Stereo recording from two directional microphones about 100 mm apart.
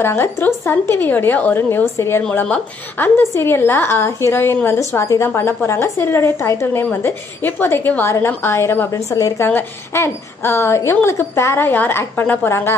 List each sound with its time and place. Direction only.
0.0 s a woman's voice: 25° left (ahead or behind)
9.5 s a woman's voice: 25° left (ahead or behind)